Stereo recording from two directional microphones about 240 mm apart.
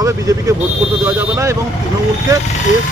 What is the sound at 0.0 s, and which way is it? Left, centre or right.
Speech, centre.